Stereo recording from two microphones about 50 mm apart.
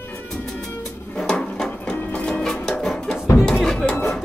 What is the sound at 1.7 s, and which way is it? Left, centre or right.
Printer, left.